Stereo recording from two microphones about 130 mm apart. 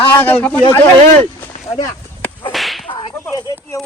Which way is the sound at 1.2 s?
15° left (ahead or behind).